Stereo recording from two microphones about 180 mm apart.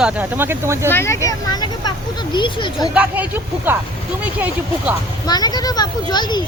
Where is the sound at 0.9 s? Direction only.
15° left (ahead or behind).